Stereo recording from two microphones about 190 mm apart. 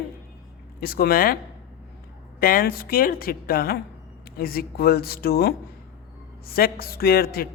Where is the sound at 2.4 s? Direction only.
50° left (ahead or behind).